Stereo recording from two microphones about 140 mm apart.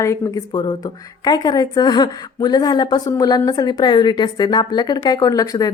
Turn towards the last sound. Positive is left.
turn(degrees=25)  # may be behind; listen again after turning